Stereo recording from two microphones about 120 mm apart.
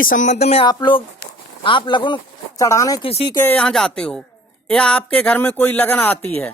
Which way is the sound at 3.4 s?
15° left (ahead or behind).